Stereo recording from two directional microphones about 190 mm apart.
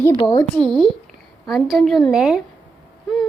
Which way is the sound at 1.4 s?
Centre (ahead or behind).